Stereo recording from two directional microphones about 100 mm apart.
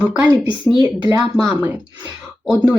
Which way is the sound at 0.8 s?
30° right (ahead or behind).